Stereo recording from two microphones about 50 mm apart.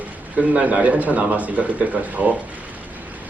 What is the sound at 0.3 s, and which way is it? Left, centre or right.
A man's voice, right.